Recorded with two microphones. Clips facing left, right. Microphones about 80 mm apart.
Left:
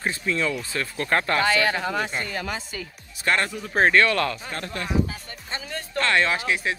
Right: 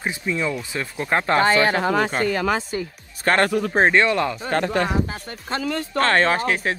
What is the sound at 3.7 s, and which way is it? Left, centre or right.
Speech, right.